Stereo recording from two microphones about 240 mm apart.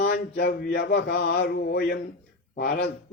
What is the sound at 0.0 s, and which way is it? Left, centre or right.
A man's voice, left.